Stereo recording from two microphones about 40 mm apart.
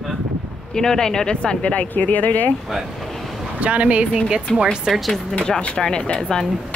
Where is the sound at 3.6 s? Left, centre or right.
Right.